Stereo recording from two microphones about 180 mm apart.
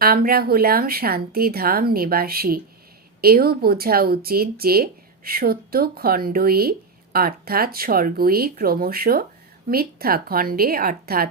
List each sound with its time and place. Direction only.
0.0 s speech: 55° right (ahead or behind)